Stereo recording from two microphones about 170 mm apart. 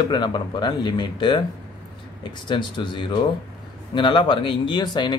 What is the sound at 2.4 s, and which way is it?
Speech, 25° left (ahead or behind).